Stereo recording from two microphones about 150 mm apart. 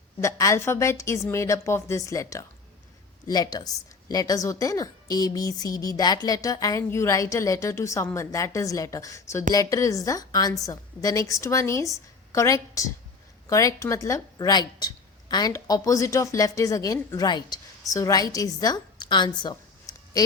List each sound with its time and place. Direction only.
0.2 s a woman's voice: 20° left (ahead or behind)